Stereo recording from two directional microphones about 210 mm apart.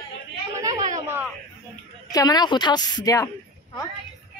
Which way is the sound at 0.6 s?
15° right (ahead or behind).